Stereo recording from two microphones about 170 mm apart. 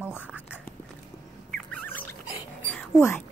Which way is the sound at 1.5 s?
10° left (ahead or behind).